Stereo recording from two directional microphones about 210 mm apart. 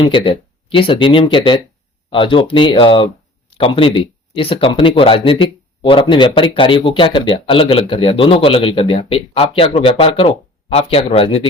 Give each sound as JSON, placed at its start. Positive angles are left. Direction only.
{"t": 0.0, "sound": "speech", "side_deg": 25}